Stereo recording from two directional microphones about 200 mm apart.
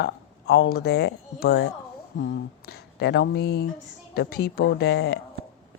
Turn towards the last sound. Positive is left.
turn(degrees=55)  # may be behind; listen again after turning